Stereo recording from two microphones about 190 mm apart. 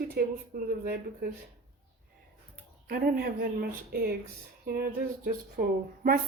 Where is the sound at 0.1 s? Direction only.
55° right (ahead or behind).